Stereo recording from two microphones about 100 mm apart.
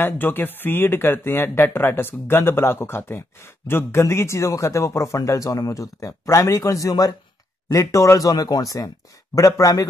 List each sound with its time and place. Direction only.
0.0 s speech: 20° left (ahead or behind); by 9.8 s 35° left (ahead or behind)